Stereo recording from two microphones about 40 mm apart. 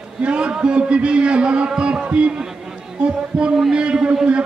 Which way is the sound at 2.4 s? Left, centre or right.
Centre.